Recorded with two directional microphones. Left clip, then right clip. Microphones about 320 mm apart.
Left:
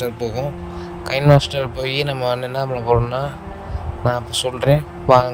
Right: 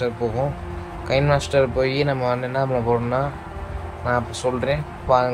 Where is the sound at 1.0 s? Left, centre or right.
Left.